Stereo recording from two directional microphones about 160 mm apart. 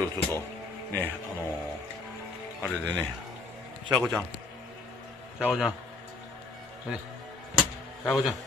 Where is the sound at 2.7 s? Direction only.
10° left (ahead or behind).